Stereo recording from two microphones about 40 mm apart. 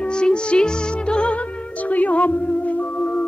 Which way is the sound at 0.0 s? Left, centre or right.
Left.